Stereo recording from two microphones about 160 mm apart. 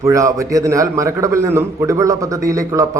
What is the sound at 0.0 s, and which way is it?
A man's voice, 20° right (ahead or behind).